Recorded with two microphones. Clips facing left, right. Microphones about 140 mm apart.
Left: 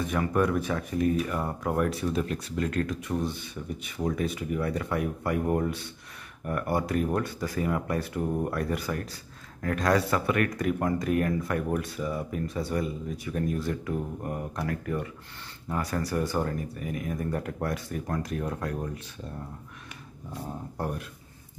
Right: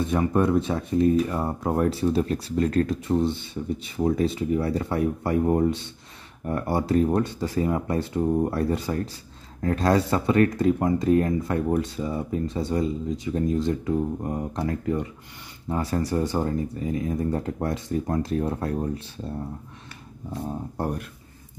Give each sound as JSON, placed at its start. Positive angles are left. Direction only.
{"t": 0.0, "sound": "speech", "side_deg": -25}
{"t": 20.8, "sound": "speech", "side_deg": -30}